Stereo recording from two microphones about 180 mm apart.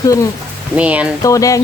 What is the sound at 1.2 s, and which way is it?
Speech, 20° left (ahead or behind).